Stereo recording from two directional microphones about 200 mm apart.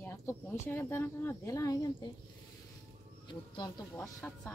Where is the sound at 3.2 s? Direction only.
20° left (ahead or behind).